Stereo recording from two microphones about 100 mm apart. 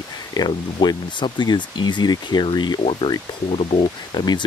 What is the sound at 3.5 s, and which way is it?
Speech, 85° left.